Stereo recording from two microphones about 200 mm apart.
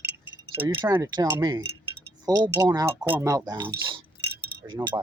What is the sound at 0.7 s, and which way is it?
Speech, 20° right (ahead or behind).